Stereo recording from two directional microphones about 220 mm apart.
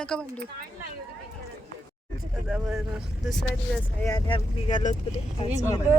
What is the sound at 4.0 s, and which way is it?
Speech, 15° left (ahead or behind).